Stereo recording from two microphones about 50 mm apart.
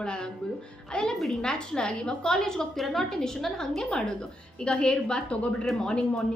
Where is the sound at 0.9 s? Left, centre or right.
Centre.